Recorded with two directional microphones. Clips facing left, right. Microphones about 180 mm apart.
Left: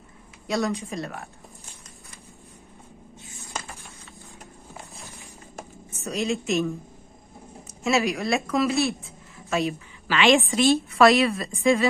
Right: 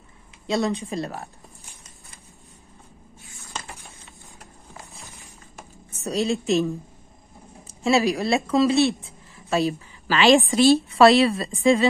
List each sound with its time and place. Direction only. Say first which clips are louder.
0.5 s speech: right 2 dB; 25° right (ahead or behind)
6.0 s speech: right 3 dB; 35° right (ahead or behind)
7.6 s a woman's voice: right 3 dB; 30° right (ahead or behind)